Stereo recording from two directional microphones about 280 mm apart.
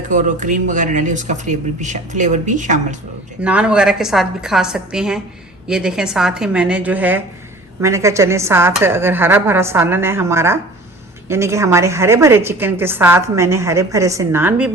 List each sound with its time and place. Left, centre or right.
0.1 s speech: right
3.4 s a woman's voice: centre